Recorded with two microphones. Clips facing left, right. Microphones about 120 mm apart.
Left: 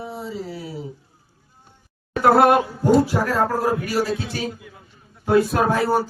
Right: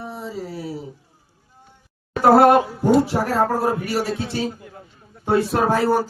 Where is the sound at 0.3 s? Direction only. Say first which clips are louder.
Even; 45° right (ahead or behind).